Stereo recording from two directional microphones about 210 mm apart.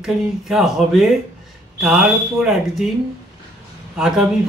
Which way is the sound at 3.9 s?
5° right (ahead or behind).